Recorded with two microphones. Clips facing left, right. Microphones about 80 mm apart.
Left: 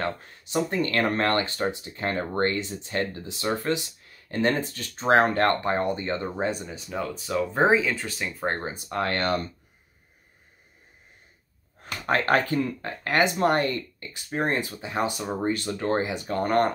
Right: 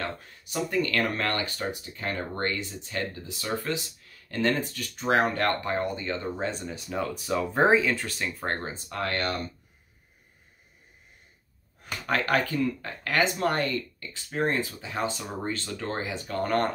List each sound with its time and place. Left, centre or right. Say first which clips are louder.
0.0 s speech: left 4 dB; left
5.6 s speech: left 4 dB; left
6.5 s speech: left 1 dB; centre
8.5 s speech: left 5 dB; centre
8.8 s speech: left 4 dB; left
11.8 s speech: left 3 dB; left